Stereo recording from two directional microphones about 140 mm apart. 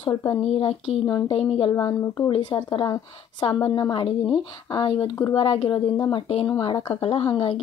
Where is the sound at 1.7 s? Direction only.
30° left (ahead or behind).